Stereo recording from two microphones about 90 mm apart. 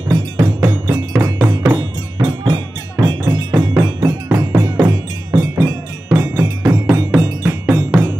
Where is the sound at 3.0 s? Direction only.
45° right (ahead or behind).